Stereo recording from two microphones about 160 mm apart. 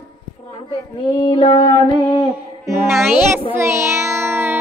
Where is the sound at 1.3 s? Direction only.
35° left (ahead or behind).